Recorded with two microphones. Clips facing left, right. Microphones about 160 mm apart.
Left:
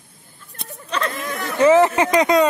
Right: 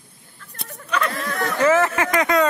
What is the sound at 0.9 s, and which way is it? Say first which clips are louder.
Speech: right 1 dB; 30° left (ahead or behind).